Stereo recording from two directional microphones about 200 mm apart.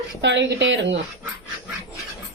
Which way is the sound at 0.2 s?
60° right (ahead or behind).